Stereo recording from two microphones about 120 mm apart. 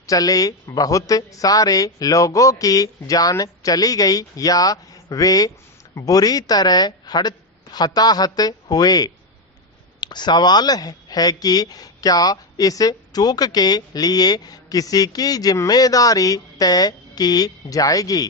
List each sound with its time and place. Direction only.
0.1 s speech: 30° left (ahead or behind)